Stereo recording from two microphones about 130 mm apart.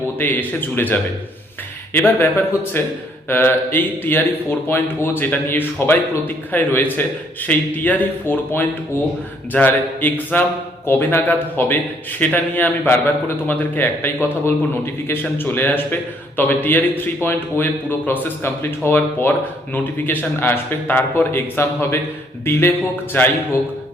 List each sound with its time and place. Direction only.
0.2 s speech: 15° left (ahead or behind)